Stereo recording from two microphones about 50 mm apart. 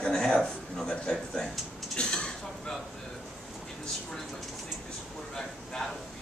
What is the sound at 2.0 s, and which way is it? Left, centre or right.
Dishes, centre.